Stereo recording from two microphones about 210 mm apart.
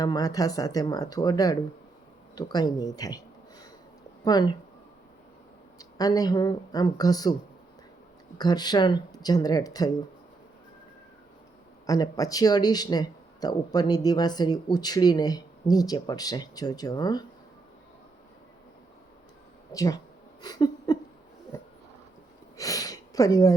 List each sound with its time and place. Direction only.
0.0 s speech: 15° left (ahead or behind)
6.0 s speech: 15° left (ahead or behind)
8.4 s speech: 20° left (ahead or behind)
11.9 s speech: 15° left (ahead or behind)
19.7 s speech: 15° left (ahead or behind)
20.4 s a sound: 20° left (ahead or behind)